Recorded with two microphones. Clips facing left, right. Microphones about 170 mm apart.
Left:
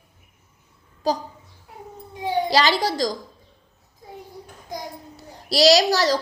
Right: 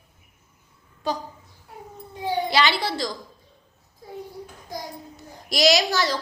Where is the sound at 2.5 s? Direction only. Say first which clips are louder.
Left 4 dB; 40° left (ahead or behind).